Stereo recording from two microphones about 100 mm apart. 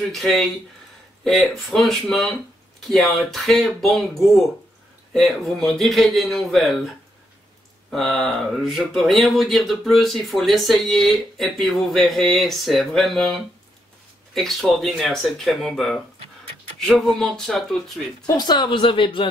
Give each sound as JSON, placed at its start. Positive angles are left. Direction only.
{"t": 0.1, "sound": "speech", "side_deg": 0}
{"t": 1.5, "sound": "speech", "side_deg": 0}
{"t": 7.9, "sound": "speech", "side_deg": 0}
{"t": 18.2, "sound": "speech", "side_deg": 45}